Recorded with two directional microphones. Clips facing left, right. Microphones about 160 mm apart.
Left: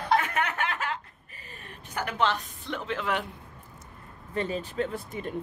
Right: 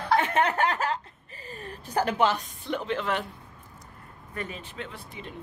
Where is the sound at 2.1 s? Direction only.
5° right (ahead or behind).